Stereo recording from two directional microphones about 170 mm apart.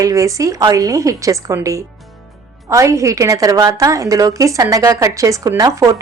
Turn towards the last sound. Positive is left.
turn(degrees=-20)  # may be behind; listen again after turning